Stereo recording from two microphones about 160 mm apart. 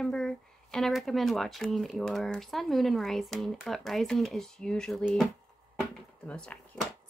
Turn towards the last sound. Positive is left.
turn(degrees=5)  # may be behind; listen again after turning